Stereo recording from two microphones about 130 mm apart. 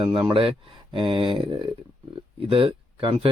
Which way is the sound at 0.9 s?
40° right (ahead or behind).